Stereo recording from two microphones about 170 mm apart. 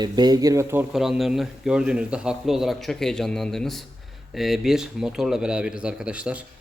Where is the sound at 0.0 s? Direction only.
25° right (ahead or behind).